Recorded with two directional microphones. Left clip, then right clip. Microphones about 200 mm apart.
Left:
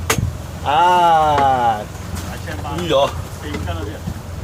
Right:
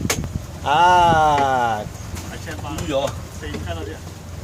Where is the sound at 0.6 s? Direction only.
30° right (ahead or behind).